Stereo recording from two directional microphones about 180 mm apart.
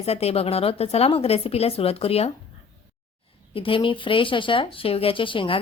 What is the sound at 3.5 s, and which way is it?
Speech, 30° left (ahead or behind).